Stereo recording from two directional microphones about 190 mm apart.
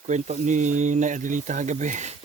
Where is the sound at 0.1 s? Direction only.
40° right (ahead or behind).